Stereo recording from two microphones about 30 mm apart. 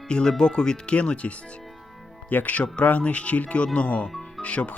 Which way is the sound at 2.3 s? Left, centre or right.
Left.